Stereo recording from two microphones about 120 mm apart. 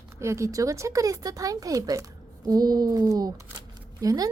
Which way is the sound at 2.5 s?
35° right (ahead or behind).